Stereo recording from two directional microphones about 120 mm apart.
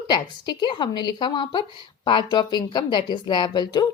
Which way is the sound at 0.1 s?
40° left (ahead or behind).